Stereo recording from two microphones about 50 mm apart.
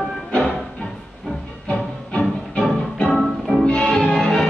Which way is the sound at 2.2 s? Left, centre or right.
Centre.